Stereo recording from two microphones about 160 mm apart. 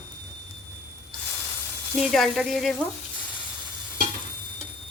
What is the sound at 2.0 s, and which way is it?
Speech, centre (ahead or behind).